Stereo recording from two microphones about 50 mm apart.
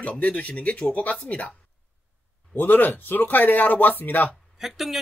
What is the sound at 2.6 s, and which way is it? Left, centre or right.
Speech, left.